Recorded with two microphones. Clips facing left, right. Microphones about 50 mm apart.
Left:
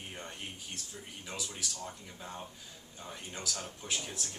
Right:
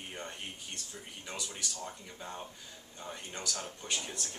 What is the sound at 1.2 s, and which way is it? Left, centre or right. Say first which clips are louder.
Speech: even; centre.